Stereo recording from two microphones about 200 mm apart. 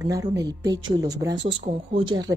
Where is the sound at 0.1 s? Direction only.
15° right (ahead or behind).